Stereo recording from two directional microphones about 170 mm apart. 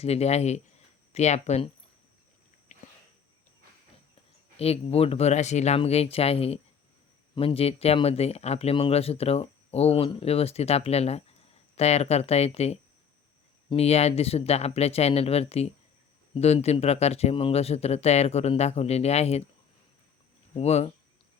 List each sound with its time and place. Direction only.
0.0 s speech: 40° left (ahead or behind)
2.7 s a sound: 45° left (ahead or behind)
4.5 s speech: 35° left (ahead or behind)
20.6 s speech: 40° left (ahead or behind)